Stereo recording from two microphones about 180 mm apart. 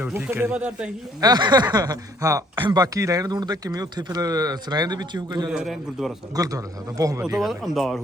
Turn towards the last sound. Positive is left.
turn(degrees=0)  # may be behind; listen again after turning